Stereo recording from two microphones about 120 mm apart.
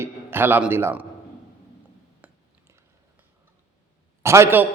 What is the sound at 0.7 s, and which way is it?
Speech, 20° right (ahead or behind).